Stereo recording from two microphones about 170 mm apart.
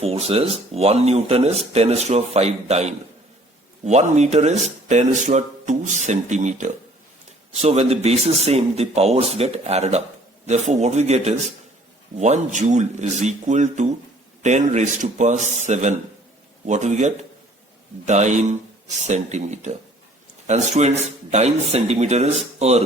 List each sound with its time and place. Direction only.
0.0 s speech: 35° right (ahead or behind)